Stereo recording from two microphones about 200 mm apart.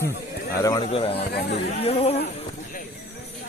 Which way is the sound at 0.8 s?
30° left (ahead or behind).